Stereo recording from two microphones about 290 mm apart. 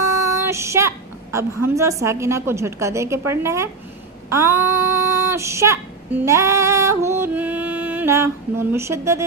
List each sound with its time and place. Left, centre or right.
0.0 s speech: centre
4.3 s child singing: centre